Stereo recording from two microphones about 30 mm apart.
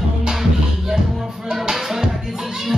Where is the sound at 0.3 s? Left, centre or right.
Centre.